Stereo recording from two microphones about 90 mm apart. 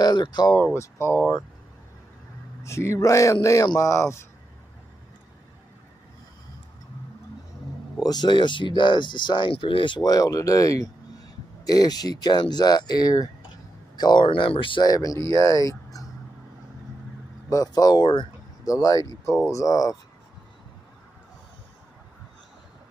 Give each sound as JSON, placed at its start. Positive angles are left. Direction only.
{"t": 0.0, "sound": "speech", "side_deg": 55}
{"t": 0.6, "sound": "speech", "side_deg": 30}
{"t": 2.6, "sound": "speech", "side_deg": 30}
{"t": 8.0, "sound": "speech", "side_deg": 50}
{"t": 10.0, "sound": "speech", "side_deg": 40}
{"t": 13.9, "sound": "speech", "side_deg": 55}
{"t": 14.8, "sound": "speech", "side_deg": 45}
{"t": 17.5, "sound": "speech", "side_deg": 45}
{"t": 18.7, "sound": "speech", "side_deg": 40}